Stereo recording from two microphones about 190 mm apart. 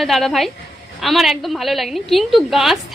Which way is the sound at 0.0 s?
Centre (ahead or behind).